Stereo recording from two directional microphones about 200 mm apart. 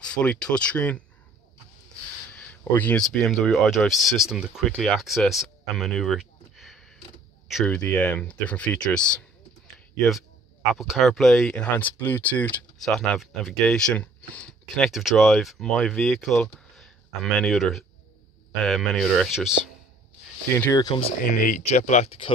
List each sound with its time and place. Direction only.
0.0 s speech: 5° left (ahead or behind)
2.3 s speech: 5° left (ahead or behind)
10.7 s speech: centre (ahead or behind)
20.6 s speech: 15° left (ahead or behind)
21.0 s speech: 40° left (ahead or behind)